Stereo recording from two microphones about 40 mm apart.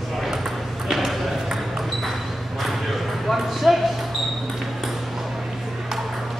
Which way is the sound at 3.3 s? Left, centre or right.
Centre.